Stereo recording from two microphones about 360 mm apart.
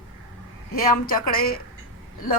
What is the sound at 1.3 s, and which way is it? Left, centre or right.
Speech, left.